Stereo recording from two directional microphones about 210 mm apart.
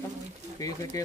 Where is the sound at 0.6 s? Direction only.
15° left (ahead or behind).